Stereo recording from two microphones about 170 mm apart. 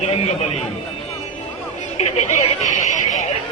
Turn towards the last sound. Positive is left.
turn(degrees=45)  # may be behind; listen again after turning